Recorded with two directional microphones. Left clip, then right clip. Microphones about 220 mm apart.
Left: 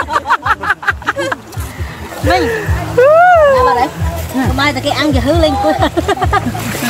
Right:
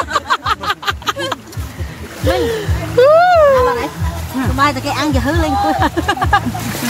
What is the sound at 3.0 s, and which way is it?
Music, 15° right (ahead or behind).